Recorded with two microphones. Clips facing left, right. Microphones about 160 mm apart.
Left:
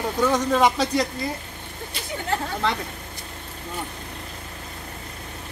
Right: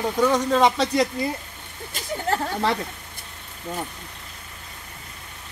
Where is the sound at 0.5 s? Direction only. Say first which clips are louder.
Right 1 dB; 5° left (ahead or behind).